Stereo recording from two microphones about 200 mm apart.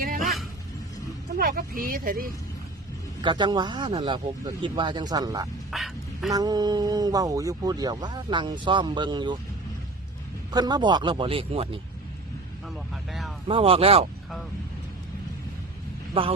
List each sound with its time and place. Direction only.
0.2 s a sound: centre (ahead or behind)
1.4 s speech: 45° right (ahead or behind)
3.2 s speech: 20° right (ahead or behind)
5.7 s a sound: centre (ahead or behind)
6.3 s speech: 20° right (ahead or behind)
10.5 s speech: 20° right (ahead or behind)
12.6 s vehicle: centre (ahead or behind)
13.5 s speech: 30° right (ahead or behind)